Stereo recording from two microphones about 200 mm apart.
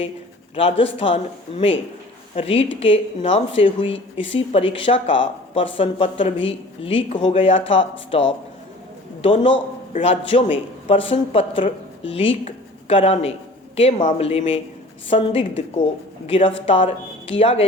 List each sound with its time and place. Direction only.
0.5 s speech: 25° left (ahead or behind)
3.8 s speech: 70° left (ahead or behind)
4.3 s a woman's voice: 25° left (ahead or behind)